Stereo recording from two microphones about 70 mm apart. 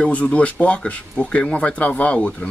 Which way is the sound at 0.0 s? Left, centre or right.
Centre.